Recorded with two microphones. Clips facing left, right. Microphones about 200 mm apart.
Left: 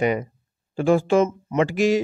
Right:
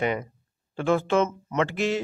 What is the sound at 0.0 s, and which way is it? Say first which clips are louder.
Speech: left 5 dB; 15° left (ahead or behind).